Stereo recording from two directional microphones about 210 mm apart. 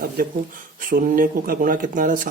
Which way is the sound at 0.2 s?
40° right (ahead or behind).